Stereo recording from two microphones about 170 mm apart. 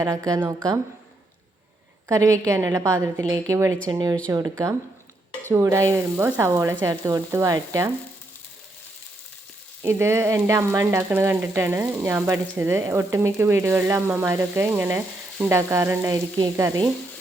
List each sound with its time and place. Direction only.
0.3 s frying: 15° right (ahead or behind)
2.0 s frying: 15° right (ahead or behind)
3.8 s speech: 25° right (ahead or behind)
4.3 s frying: 15° right (ahead or behind)
6.8 s speech: 20° right (ahead or behind)
9.8 s frying: 15° right (ahead or behind)
16.1 s speech: 20° right (ahead or behind)